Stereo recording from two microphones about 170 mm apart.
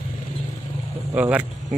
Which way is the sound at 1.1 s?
10° right (ahead or behind).